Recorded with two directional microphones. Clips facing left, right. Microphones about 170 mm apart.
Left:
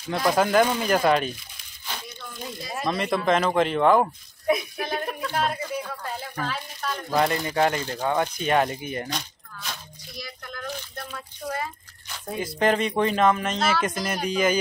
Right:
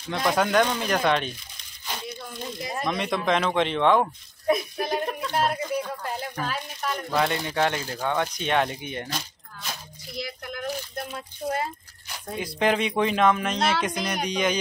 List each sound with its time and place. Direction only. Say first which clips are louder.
0.1 s speech: left 2 dB; centre (ahead or behind)
2.7 s speech: left 2 dB; centre (ahead or behind)
4.8 s a sound: right 2 dB; 15° right (ahead or behind)
7.1 s speech: left 3 dB; centre (ahead or behind)
10.1 s a sound: right 5 dB; 20° right (ahead or behind)
12.4 s speech: left 1 dB; centre (ahead or behind)